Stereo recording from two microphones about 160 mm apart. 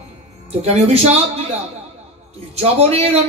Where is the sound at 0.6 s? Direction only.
40° right (ahead or behind).